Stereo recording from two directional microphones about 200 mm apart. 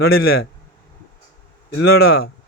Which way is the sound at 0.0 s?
50° left (ahead or behind).